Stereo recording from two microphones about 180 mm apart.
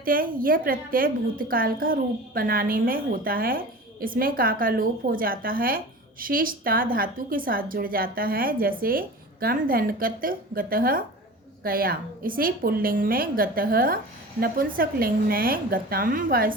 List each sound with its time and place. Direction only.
0.0 s a woman's voice: 50° right (ahead or behind)